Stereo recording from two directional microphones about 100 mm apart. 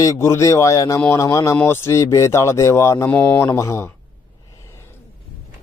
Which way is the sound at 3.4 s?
30° left (ahead or behind).